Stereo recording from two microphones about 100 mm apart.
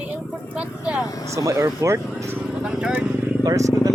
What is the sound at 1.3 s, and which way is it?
Speech, 30° right (ahead or behind).